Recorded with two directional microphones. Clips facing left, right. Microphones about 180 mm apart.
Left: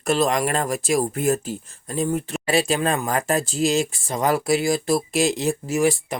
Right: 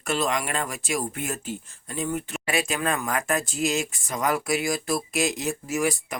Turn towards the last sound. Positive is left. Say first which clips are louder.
# left 5 dB
turn(degrees=30)  # may be behind; listen again after turning